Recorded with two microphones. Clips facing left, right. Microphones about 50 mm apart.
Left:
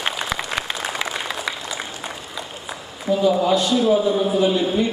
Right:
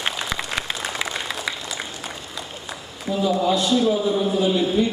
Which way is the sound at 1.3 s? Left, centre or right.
Centre.